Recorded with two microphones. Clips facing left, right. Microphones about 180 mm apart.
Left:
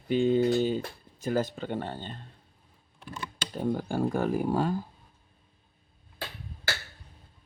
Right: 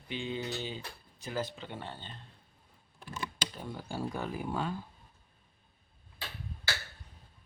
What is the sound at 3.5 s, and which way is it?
Speech, 50° left (ahead or behind).